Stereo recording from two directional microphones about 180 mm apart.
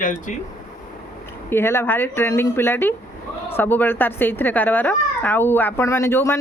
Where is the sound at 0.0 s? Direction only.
45° left (ahead or behind).